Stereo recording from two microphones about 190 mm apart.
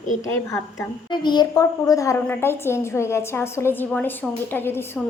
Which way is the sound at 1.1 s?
25° left (ahead or behind).